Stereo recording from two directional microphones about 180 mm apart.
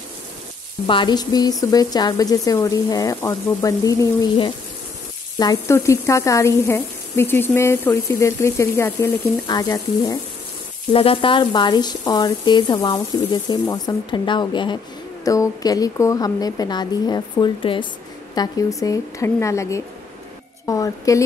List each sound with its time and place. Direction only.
0.8 s a woman's voice: 25° left (ahead or behind)